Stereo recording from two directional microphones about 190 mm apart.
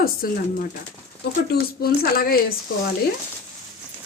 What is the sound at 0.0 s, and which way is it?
Speech, 50° left (ahead or behind).